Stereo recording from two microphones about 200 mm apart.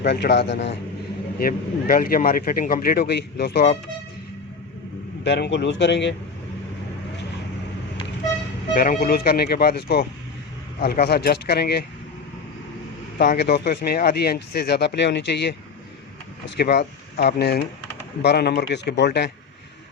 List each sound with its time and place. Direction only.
0.0 s a man's voice: 55° left (ahead or behind)
1.4 s speech: 45° left (ahead or behind)
5.2 s a man's voice: 60° left (ahead or behind)
8.7 s speech: 45° left (ahead or behind)
13.1 s speech: 55° left (ahead or behind)
16.6 s a man's voice: 55° left (ahead or behind)